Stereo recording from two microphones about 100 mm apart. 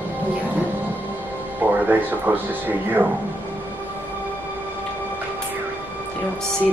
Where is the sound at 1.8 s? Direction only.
20° right (ahead or behind).